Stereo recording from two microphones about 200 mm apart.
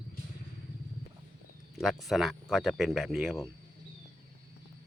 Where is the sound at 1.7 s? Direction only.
Centre (ahead or behind).